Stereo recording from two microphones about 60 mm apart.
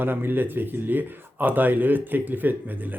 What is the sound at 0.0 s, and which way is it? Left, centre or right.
Speech, right.